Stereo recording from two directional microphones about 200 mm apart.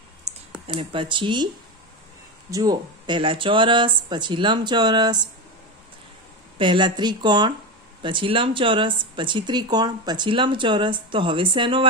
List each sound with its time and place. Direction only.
0.3 s typing: 35° right (ahead or behind)
0.7 s speech: 25° right (ahead or behind)
2.5 s speech: 20° right (ahead or behind)
6.6 s speech: 25° right (ahead or behind)